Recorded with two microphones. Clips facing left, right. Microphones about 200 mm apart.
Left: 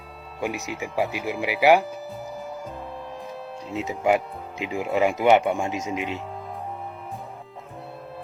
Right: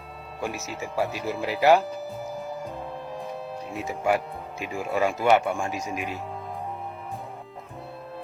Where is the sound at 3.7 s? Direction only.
20° left (ahead or behind).